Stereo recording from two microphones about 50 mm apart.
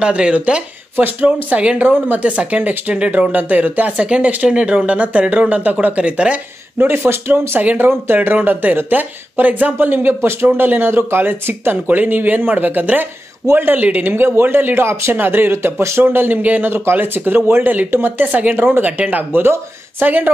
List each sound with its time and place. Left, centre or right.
0.0 s speech: right
0.9 s speech: right
7.1 s speech: right
7.6 s speech: right
14.9 s speech: right
15.1 s speech: right
15.5 s speech: right
16.0 s speech: right
18.3 s speech: right
18.9 s speech: right
19.3 s speech: right